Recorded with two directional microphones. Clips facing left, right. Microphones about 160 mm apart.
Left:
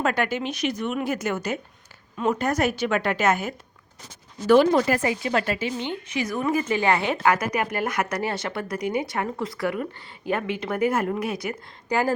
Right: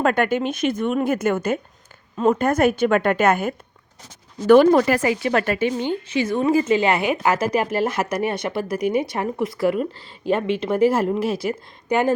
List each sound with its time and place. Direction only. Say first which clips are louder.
0.0 s speech: right 5 dB; 50° right (ahead or behind)
5.8 s speech: right 6 dB; 35° right (ahead or behind); by 7.3 s 15° right (ahead or behind)
7.3 s speech: right 1 dB; 30° right (ahead or behind)